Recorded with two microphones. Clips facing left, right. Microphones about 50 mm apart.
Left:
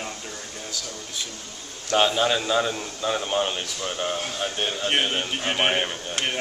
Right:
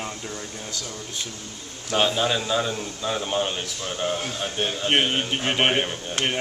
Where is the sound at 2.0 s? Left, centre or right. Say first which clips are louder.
Left 1 dB; centre.